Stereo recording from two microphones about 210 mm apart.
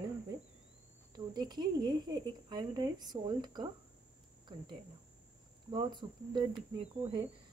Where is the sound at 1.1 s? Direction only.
20° right (ahead or behind).